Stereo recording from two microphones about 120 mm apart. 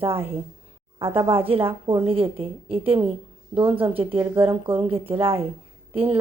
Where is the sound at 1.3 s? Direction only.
50° right (ahead or behind).